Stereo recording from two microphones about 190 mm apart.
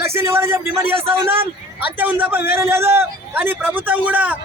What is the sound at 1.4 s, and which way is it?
A man's voice, 10° right (ahead or behind).